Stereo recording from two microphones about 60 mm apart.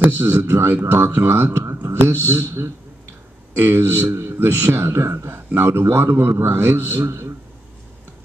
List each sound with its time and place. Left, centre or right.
0.2 s a man's voice: right